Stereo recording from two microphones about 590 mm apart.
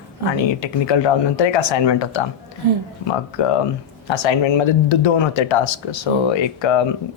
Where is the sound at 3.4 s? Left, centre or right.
Left.